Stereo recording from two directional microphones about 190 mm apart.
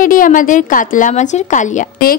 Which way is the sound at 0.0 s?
45° left (ahead or behind).